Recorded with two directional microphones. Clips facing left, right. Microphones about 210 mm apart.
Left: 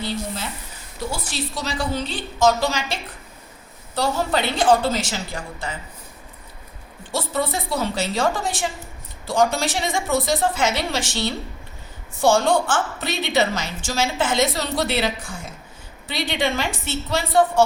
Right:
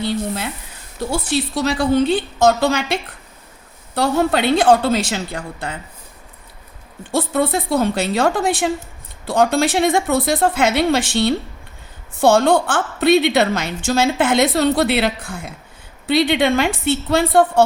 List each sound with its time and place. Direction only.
0.0 s a sound: 60° right (ahead or behind)
1.1 s a woman's voice: 60° right (ahead or behind)
7.1 s a woman's voice: 55° right (ahead or behind)